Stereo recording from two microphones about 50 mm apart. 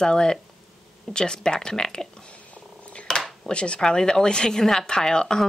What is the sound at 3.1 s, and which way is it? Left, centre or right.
Dishes, centre.